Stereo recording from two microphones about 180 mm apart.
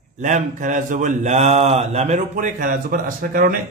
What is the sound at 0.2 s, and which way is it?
Speech, 45° right (ahead or behind).